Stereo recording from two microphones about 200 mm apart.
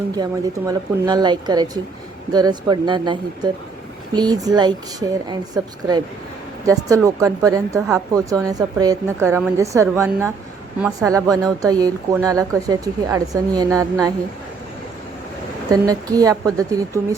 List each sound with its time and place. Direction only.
0.2 s speech: 15° right (ahead or behind)
6.7 s a woman's voice: 15° right (ahead or behind)
15.7 s a woman's voice: 20° right (ahead or behind)